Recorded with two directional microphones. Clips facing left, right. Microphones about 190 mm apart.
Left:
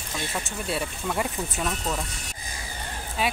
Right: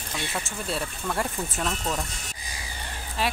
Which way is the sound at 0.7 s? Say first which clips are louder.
Left 1 dB; 5° left (ahead or behind).